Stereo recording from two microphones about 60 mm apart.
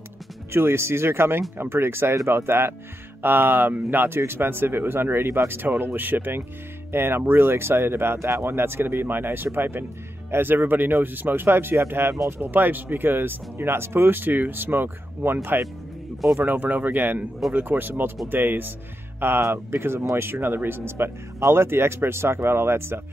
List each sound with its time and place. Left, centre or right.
0.5 s speech: right
16.3 s speech: right